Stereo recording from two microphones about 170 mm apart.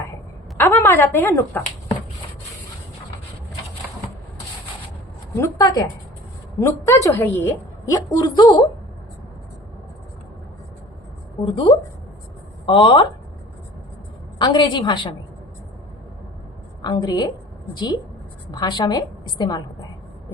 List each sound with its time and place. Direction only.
0.5 s a woman's voice: 15° left (ahead or behind)
5.4 s a woman's voice: 20° left (ahead or behind)
11.4 s a woman's voice: 30° left (ahead or behind)
14.3 s a woman's voice: 25° left (ahead or behind)
16.8 s a woman's voice: 25° left (ahead or behind)
18.5 s a woman's voice: 25° left (ahead or behind)